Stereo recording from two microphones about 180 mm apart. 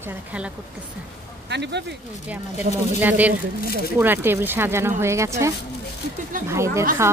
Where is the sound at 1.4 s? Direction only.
70° right (ahead or behind).